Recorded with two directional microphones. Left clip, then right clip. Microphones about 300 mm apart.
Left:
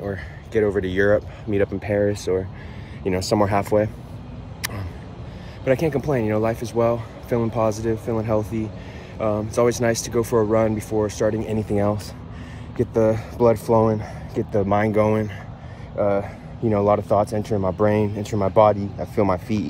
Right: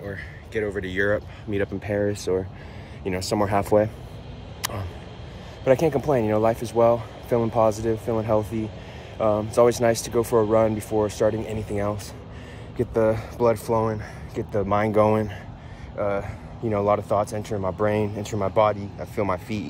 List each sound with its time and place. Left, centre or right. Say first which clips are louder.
0.0 s speech: left 5 dB; centre
4.6 s a sound: even; centre
5.7 s speech: right 1 dB; centre